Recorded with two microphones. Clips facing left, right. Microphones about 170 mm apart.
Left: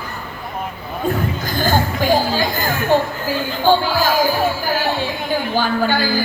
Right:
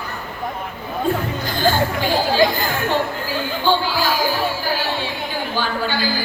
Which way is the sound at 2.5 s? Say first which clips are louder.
Left 4 dB; 45° left (ahead or behind).